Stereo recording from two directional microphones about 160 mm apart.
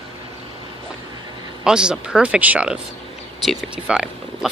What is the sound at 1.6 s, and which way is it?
Speech, 5° right (ahead or behind).